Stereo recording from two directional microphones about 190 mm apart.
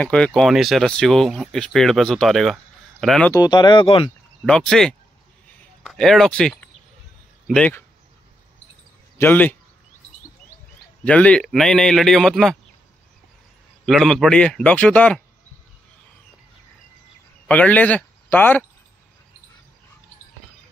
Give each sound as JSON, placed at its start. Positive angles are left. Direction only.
{"t": 0.0, "sound": "speech", "side_deg": 5}
{"t": 3.3, "sound": "speech", "side_deg": 20}
{"t": 4.5, "sound": "speech", "side_deg": 5}
{"t": 5.6, "sound": "a sound", "side_deg": 0}
{"t": 7.4, "sound": "speech", "side_deg": 5}
{"t": 9.2, "sound": "speech", "side_deg": 10}
{"t": 11.1, "sound": "speech", "side_deg": 5}
{"t": 13.8, "sound": "speech", "side_deg": 0}
{"t": 17.5, "sound": "speech", "side_deg": 10}